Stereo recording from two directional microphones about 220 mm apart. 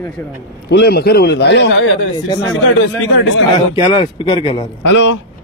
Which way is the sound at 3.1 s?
55° left (ahead or behind).